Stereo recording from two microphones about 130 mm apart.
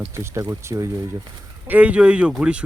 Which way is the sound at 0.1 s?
20° right (ahead or behind).